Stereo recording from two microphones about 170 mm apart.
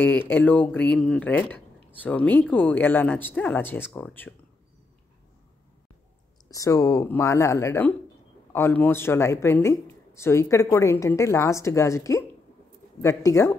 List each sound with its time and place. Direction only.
0.0 s speech: 10° left (ahead or behind)
6.5 s speech: 20° left (ahead or behind)